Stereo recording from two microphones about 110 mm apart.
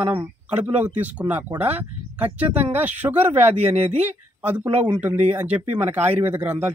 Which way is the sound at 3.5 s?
75° right (ahead or behind).